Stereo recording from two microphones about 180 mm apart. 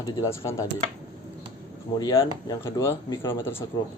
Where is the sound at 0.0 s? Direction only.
15° left (ahead or behind).